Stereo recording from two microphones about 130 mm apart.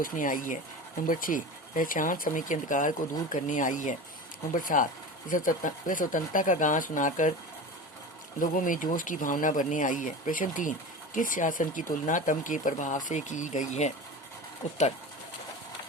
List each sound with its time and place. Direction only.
0.0 s speech: 90° left
3.3 s speech: 75° left (ahead or behind)
8.4 s speech: 90° left; by 14.8 s 60° left (ahead or behind)